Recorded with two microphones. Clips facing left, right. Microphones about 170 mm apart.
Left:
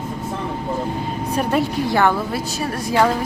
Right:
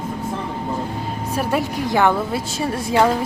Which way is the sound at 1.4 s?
10° right (ahead or behind).